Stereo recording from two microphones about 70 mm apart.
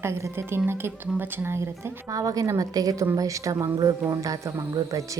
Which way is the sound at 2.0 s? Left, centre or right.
Right.